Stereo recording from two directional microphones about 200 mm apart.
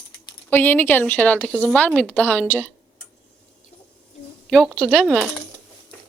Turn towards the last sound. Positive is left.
turn(degrees=0)  # may be behind; listen again after turning